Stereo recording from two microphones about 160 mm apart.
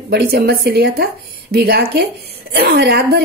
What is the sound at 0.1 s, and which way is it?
A woman's voice, 85° right.